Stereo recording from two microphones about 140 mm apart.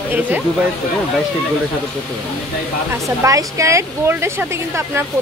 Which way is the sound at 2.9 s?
20° right (ahead or behind).